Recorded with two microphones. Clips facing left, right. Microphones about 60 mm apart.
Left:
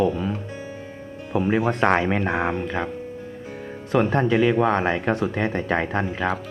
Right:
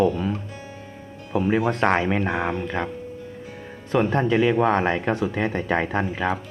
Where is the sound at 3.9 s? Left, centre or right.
Centre.